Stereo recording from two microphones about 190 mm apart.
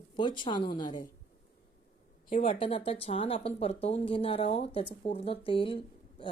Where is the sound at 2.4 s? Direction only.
30° left (ahead or behind).